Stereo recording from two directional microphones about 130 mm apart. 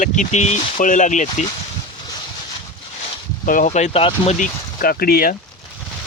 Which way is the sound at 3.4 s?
90° left.